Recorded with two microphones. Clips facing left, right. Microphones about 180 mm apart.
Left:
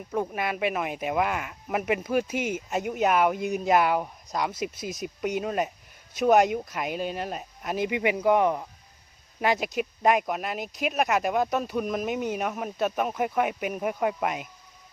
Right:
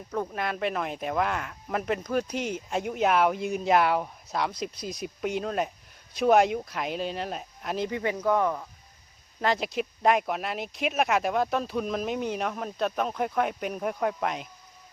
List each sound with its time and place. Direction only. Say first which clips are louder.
0.1 s speech: left 2 dB; 10° left (ahead or behind)
7.9 s speech: left 4 dB; 15° left (ahead or behind)
9.4 s speech: left 1 dB; 5° left (ahead or behind)